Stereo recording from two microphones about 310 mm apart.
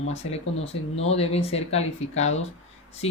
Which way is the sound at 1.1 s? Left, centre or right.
Centre.